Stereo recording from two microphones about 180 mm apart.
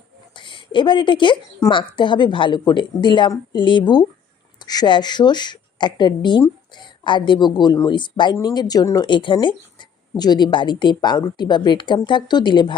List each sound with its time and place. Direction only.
0.3 s a woman's voice: 25° left (ahead or behind)